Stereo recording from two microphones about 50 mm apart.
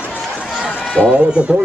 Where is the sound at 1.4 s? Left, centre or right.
Right.